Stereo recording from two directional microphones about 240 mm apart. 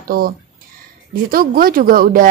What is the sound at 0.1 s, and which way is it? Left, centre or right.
Speech, right.